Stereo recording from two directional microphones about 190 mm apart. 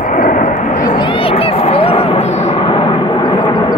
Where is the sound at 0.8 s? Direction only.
25° left (ahead or behind).